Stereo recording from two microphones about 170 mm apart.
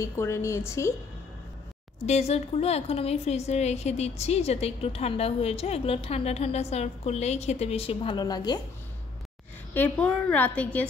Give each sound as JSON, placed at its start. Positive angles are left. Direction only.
{"t": 0.0, "sound": "a woman's voice", "side_deg": 15}
{"t": 2.0, "sound": "a woman's voice", "side_deg": 40}
{"t": 9.8, "sound": "a woman's voice", "side_deg": 10}